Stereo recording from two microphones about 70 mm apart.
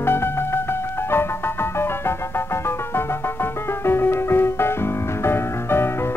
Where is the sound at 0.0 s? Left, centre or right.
Left.